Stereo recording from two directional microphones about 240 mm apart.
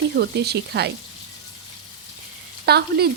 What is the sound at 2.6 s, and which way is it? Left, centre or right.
Speech, right.